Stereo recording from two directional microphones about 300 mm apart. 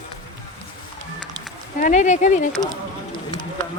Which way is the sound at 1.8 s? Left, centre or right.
Left.